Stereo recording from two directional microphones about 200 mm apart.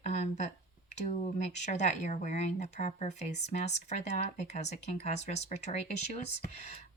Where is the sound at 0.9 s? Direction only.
35° left (ahead or behind).